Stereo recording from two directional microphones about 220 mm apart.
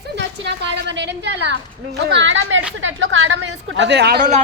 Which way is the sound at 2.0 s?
55° right (ahead or behind).